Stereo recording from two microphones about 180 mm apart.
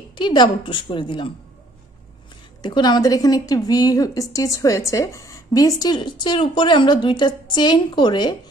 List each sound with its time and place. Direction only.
0.1 s a woman's voice: 25° left (ahead or behind)
2.6 s a woman's voice: 25° left (ahead or behind)